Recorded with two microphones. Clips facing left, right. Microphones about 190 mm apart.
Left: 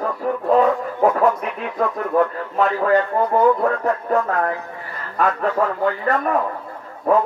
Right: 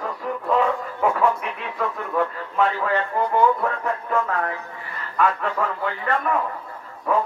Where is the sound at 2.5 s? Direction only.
40° left (ahead or behind).